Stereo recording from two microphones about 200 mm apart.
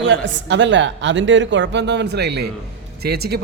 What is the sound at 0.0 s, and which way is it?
Speech, 60° right (ahead or behind).